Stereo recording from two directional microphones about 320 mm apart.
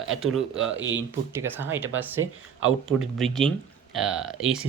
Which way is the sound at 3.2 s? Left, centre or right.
Centre.